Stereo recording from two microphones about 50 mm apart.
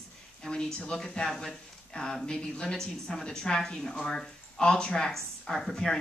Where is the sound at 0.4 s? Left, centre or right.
Centre.